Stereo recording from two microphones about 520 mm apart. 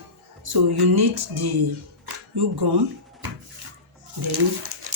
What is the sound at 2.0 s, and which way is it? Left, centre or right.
Speech, right.